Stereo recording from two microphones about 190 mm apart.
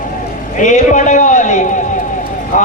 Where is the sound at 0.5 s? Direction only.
40° left (ahead or behind).